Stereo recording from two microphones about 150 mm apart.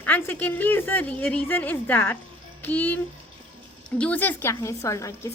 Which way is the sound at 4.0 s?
10° left (ahead or behind).